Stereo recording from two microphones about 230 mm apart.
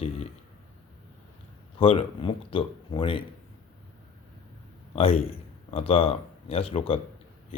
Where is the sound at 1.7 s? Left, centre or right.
Left.